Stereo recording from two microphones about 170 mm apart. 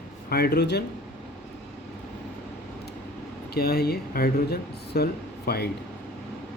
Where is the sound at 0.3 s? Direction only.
65° left (ahead or behind).